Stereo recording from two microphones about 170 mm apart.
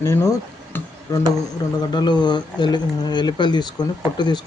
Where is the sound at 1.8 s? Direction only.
25° left (ahead or behind).